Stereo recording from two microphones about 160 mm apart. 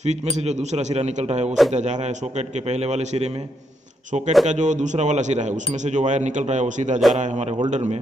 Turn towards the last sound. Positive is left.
turn(degrees=-45)  # may be behind; listen again after turning